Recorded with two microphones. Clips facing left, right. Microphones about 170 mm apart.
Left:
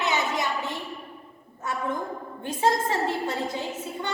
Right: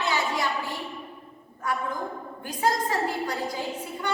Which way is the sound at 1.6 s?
25° left (ahead or behind).